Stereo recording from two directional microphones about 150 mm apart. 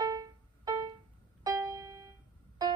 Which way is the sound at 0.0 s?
25° right (ahead or behind).